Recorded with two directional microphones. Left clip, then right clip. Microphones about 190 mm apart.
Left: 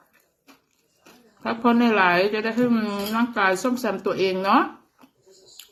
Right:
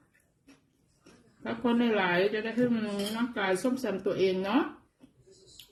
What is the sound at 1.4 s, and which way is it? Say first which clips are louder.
A woman's voice: left 9 dB; 10° right (ahead or behind).